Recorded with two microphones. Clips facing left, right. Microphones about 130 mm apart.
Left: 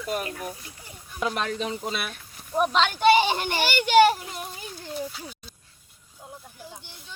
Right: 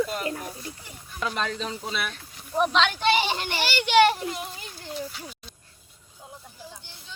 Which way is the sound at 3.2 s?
50° left (ahead or behind).